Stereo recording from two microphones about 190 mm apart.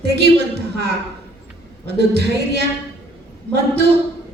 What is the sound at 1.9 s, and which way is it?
Speech, 60° right (ahead or behind).